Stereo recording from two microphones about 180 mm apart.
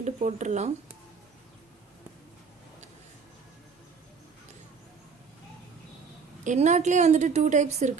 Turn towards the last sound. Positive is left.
turn(degrees=-40)  # may be behind; listen again after turning